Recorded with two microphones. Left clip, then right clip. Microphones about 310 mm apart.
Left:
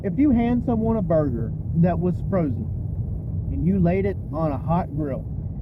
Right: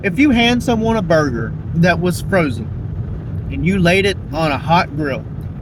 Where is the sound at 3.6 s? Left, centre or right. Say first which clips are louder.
Right 9 dB; right.